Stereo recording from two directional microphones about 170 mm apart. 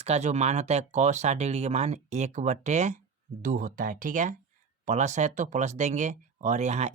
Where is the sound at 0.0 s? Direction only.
40° right (ahead or behind).